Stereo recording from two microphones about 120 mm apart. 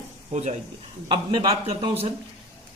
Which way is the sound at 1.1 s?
50° right (ahead or behind).